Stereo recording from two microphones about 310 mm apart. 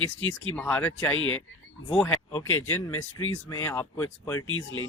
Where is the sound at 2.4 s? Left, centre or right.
Left.